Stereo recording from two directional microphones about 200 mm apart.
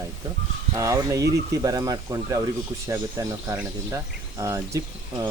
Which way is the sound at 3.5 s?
15° right (ahead or behind).